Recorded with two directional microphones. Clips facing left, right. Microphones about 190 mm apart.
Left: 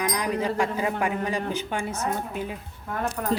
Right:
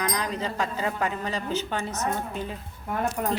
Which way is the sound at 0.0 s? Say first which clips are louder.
Left 3 dB; 10° left (ahead or behind).